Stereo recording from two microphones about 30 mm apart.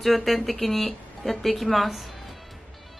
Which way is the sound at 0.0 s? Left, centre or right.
Centre.